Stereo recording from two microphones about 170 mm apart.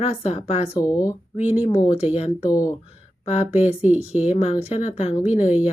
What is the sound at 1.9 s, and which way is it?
Speech, 40° left (ahead or behind).